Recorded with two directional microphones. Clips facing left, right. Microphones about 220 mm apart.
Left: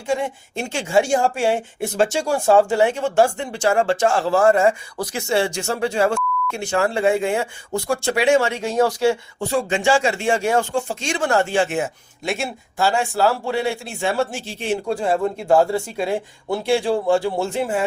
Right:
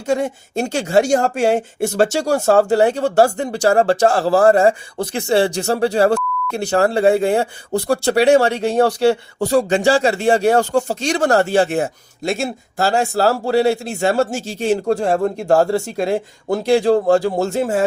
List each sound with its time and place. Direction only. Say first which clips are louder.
0.1 s speech: right 4 dB; 40° right (ahead or behind)